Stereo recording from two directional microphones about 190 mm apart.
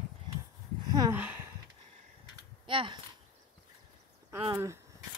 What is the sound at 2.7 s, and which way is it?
Speech, 25° right (ahead or behind).